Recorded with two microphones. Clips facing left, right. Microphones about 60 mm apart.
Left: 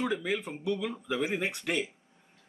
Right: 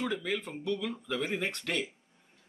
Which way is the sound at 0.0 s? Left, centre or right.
Centre.